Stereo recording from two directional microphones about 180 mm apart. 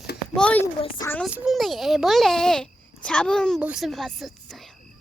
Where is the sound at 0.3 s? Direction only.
5° left (ahead or behind).